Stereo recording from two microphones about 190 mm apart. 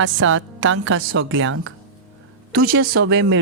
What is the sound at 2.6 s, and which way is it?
Speech, 50° right (ahead or behind).